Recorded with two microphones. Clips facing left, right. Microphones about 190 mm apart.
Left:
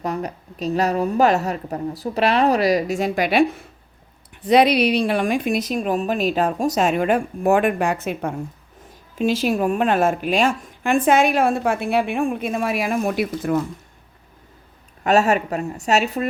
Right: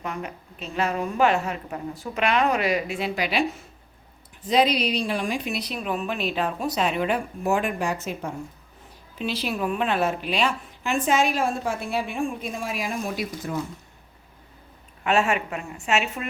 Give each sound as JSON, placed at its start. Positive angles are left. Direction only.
{"t": 0.0, "sound": "a woman's voice", "side_deg": 40}
{"t": 4.4, "sound": "a woman's voice", "side_deg": 65}
{"t": 9.1, "sound": "a woman's voice", "side_deg": 45}
{"t": 15.0, "sound": "a woman's voice", "side_deg": 40}